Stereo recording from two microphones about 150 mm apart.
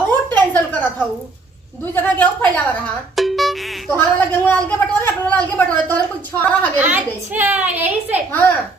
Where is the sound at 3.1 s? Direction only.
Centre (ahead or behind).